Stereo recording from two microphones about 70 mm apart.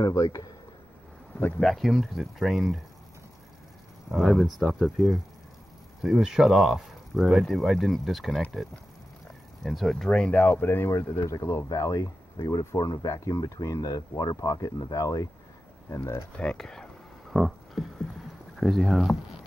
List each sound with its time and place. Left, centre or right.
0.1 s speech: left
1.6 s speech: centre
4.1 s speech: centre
9.6 s speech: centre
10.0 s speech: centre; by 10.9 s left
10.9 s speech: left
15.9 s speech: left
16.3 s a sound: centre
18.6 s speech: centre